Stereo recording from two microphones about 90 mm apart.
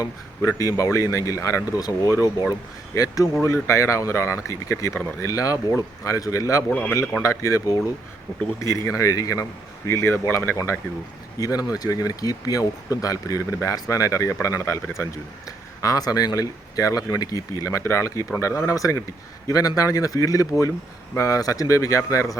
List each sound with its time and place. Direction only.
0.0 s speech: 40° left (ahead or behind)
6.7 s a man's voice: 15° left (ahead or behind)
7.2 s speech: 35° left (ahead or behind)
11.3 s speech: 45° left (ahead or behind)